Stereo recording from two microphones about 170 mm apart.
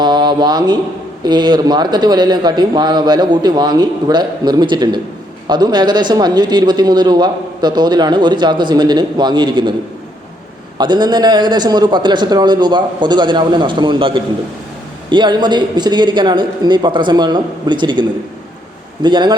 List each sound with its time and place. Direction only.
0.0 s mantra: 25° right (ahead or behind)
1.2 s speech: 25° right (ahead or behind)
10.8 s speech: 25° right (ahead or behind)
19.0 s speech: 25° right (ahead or behind)